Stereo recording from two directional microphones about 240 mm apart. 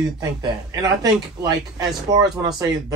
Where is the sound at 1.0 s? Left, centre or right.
Centre.